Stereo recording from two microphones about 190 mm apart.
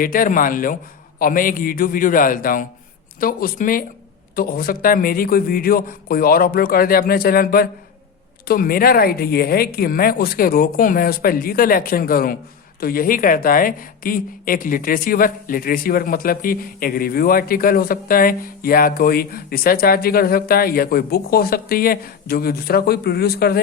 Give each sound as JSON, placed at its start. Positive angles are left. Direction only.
{"t": 0.0, "sound": "a woman's voice", "side_deg": 45}